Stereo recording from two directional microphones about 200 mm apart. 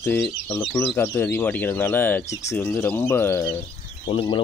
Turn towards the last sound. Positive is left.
turn(degrees=25)  # may be behind; listen again after turning